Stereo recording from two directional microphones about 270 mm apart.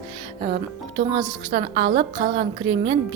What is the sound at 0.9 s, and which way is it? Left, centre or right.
A woman's voice, centre.